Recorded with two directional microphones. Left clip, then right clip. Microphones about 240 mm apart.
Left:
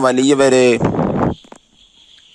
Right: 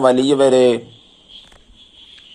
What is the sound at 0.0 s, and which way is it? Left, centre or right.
Speech, left.